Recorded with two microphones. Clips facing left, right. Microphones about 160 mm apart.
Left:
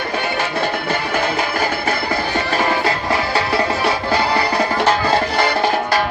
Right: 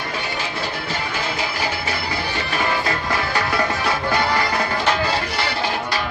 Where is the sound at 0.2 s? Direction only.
60° left (ahead or behind); by 3.0 s 40° left (ahead or behind).